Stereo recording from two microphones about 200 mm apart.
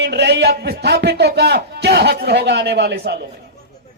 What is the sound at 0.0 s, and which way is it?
A man's voice, 55° right (ahead or behind).